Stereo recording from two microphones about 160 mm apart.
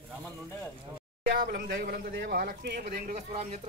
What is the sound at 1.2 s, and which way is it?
Speech, 65° right (ahead or behind).